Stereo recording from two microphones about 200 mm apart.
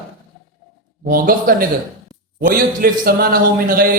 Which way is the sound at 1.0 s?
45° right (ahead or behind).